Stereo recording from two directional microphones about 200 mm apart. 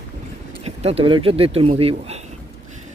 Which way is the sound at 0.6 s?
30° right (ahead or behind).